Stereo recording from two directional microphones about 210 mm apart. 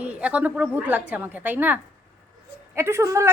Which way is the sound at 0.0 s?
5° right (ahead or behind).